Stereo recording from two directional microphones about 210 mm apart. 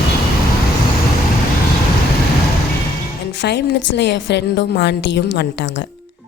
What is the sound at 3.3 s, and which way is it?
A woman's voice, 55° left (ahead or behind).